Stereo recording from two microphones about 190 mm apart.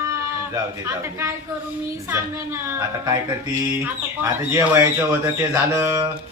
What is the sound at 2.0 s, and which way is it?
Speech, 10° right (ahead or behind).